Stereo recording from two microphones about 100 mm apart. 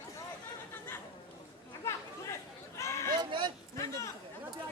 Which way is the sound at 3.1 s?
45° right (ahead or behind).